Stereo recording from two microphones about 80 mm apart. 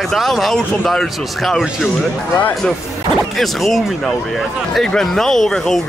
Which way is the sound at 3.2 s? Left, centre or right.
Centre.